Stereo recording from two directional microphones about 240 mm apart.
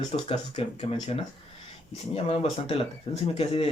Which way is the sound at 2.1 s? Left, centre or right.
Left.